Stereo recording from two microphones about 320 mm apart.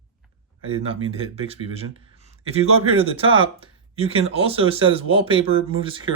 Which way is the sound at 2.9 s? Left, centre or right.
Centre.